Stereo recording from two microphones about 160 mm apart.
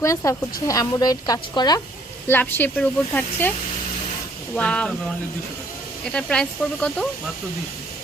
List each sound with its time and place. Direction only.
0.0 s speech: 20° left (ahead or behind)
2.2 s speech: 10° left (ahead or behind)
4.5 s speech: 5° left (ahead or behind)